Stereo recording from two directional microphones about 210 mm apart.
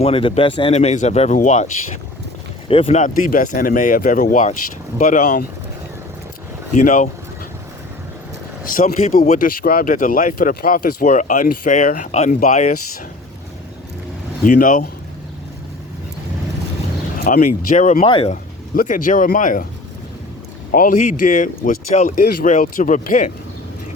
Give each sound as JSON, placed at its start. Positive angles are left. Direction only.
{"t": 0.0, "sound": "speech", "side_deg": 25}
{"t": 6.7, "sound": "speech", "side_deg": 35}
{"t": 8.6, "sound": "speech", "side_deg": 40}
{"t": 14.4, "sound": "speech", "side_deg": 40}
{"t": 17.2, "sound": "speech", "side_deg": 40}
{"t": 18.7, "sound": "speech", "side_deg": 40}
{"t": 20.7, "sound": "speech", "side_deg": 40}